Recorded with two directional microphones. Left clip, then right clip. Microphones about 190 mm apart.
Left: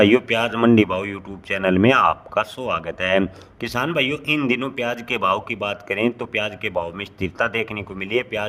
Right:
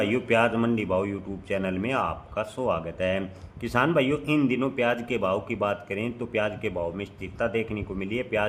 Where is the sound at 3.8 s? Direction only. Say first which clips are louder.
Left 1 dB; 5° left (ahead or behind).